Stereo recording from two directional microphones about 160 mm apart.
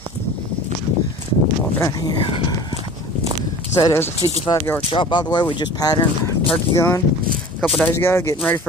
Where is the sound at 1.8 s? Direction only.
20° left (ahead or behind).